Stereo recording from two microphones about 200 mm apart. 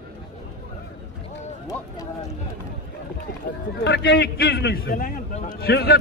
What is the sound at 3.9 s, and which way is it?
A man's voice, 55° left (ahead or behind).